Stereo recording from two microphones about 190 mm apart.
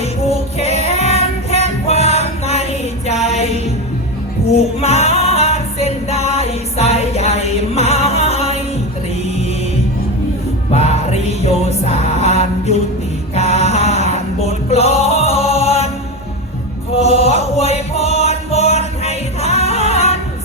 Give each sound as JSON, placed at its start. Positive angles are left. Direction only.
{"t": 0.0, "sound": "child singing", "side_deg": 35}
{"t": 3.2, "sound": "music", "side_deg": 35}
{"t": 10.7, "sound": "music", "side_deg": 35}
{"t": 13.3, "sound": "male singing", "side_deg": 35}
{"t": 16.9, "sound": "chant", "side_deg": 35}